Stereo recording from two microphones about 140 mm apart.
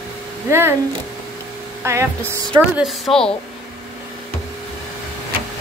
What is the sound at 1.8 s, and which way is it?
Speech, 20° right (ahead or behind).